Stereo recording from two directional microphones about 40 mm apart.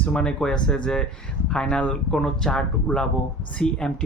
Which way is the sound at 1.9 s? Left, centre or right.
Centre.